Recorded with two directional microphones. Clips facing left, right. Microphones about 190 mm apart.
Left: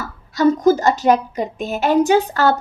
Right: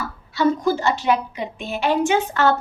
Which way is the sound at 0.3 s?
40° left (ahead or behind).